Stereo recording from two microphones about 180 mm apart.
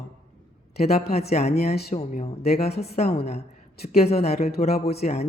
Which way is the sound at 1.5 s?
60° left (ahead or behind).